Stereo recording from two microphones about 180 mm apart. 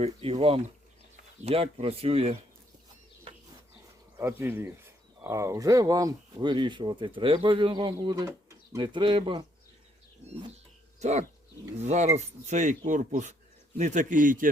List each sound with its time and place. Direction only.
0.0 s speech: 35° right (ahead or behind)
4.2 s speech: 10° right (ahead or behind); by 9.5 s 25° right (ahead or behind)
11.0 s a man's voice: 40° right (ahead or behind)